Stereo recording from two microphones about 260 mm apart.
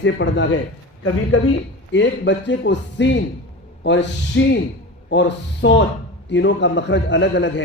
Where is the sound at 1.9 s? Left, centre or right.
Left.